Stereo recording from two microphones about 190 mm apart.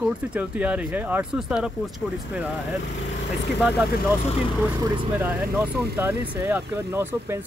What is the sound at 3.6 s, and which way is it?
Speech, centre (ahead or behind).